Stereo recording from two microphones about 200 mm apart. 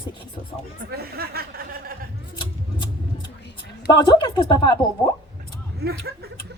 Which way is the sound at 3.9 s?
20° left (ahead or behind).